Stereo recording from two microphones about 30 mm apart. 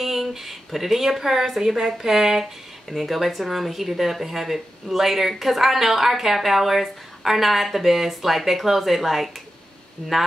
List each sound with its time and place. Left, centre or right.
0.0 s speech: centre
2.9 s speech: centre